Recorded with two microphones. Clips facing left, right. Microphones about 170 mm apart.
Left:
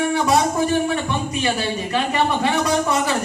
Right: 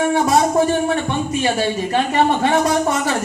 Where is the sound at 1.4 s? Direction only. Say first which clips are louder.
Right 4 dB; 40° right (ahead or behind).